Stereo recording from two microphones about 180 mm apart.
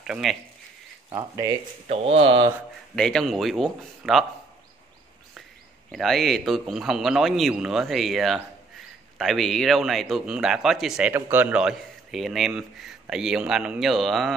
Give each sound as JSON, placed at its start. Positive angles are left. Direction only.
{"t": 0.0, "sound": "speech", "side_deg": 0}
{"t": 1.1, "sound": "speech", "side_deg": -20}
{"t": 1.9, "sound": "speech", "side_deg": -35}
{"t": 3.0, "sound": "speech", "side_deg": 5}
{"t": 5.9, "sound": "speech", "side_deg": 0}